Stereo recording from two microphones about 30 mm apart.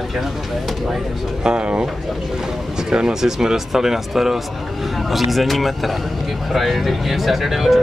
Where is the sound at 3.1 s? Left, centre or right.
Centre.